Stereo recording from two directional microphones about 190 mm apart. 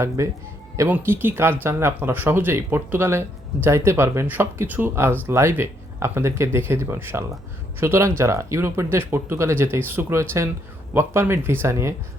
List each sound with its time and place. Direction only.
0.2 s speech: 15° right (ahead or behind)